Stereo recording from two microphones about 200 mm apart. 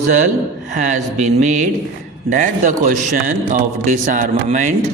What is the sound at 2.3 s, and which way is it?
Speech, 40° right (ahead or behind).